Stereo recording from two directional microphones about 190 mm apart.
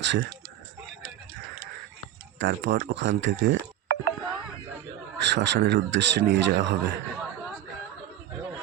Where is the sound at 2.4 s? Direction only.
65° right (ahead or behind).